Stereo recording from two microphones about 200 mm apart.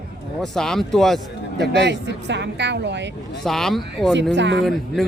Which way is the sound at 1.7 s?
60° right (ahead or behind).